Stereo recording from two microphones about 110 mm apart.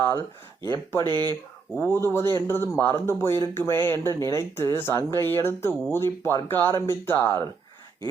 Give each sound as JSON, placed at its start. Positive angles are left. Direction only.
{"t": 0.0, "sound": "a sound", "side_deg": 25}
{"t": 0.7, "sound": "speech", "side_deg": 25}
{"t": 1.0, "sound": "speech", "side_deg": -40}
{"t": 1.8, "sound": "speech", "side_deg": 25}